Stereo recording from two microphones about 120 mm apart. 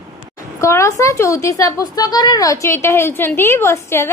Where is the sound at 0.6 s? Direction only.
25° left (ahead or behind).